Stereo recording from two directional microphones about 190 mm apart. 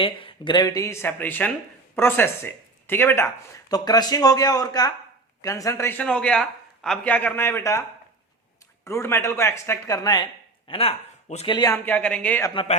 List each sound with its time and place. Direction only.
0.0 s a man's voice: 25° left (ahead or behind)
10.7 s speech: 30° left (ahead or behind)
11.5 s speech: 20° left (ahead or behind)
11.9 s a man's voice: 5° left (ahead or behind)